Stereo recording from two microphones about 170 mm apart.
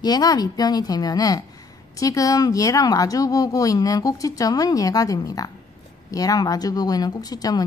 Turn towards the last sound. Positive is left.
turn(degrees=20)  # may be behind; listen again after turning